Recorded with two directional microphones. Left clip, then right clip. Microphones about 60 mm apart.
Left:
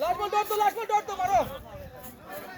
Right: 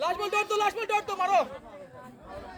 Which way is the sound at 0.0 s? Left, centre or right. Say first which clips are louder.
Left 1 dB; centre.